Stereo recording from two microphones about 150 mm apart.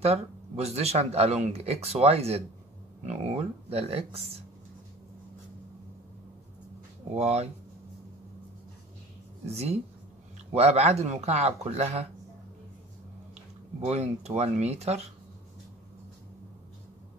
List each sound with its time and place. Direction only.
0.0 s speech: 45° right (ahead or behind)
7.2 s speech: 45° right (ahead or behind)
10.5 s speech: 45° right (ahead or behind)
13.7 s speech: 45° right (ahead or behind)